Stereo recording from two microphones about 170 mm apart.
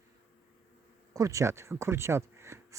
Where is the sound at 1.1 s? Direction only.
20° right (ahead or behind).